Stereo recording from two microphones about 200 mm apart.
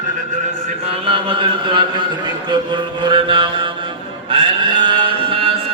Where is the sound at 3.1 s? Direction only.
25° right (ahead or behind).